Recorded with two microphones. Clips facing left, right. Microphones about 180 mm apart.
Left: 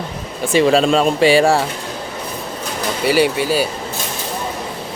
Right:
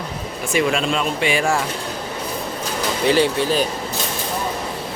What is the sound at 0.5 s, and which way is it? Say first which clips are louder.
Speech: left 7 dB; 35° left (ahead or behind).